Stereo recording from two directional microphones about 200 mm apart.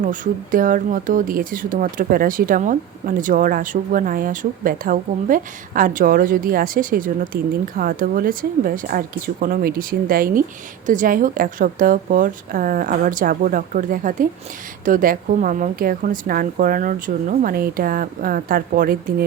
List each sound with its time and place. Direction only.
0.0 s speech: 40° right (ahead or behind)